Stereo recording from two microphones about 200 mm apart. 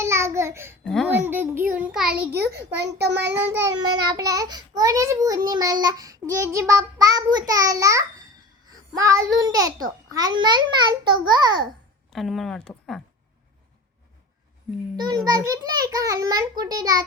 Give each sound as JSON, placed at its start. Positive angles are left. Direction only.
{"t": 0.0, "sound": "babbling", "side_deg": -15}
{"t": 1.0, "sound": "child singing", "side_deg": -10}
{"t": 2.3, "sound": "a child's voice", "side_deg": -55}
{"t": 3.2, "sound": "child singing", "side_deg": -15}
{"t": 8.7, "sound": "a child's voice", "side_deg": -15}
{"t": 12.1, "sound": "speech", "side_deg": 0}
{"t": 14.9, "sound": "a child's voice", "side_deg": -20}